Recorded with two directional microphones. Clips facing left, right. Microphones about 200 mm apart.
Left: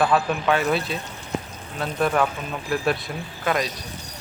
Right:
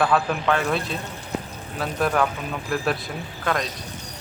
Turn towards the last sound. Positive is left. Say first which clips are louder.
# left 1 dB
turn(degrees=5)  # may be behind; listen again after turning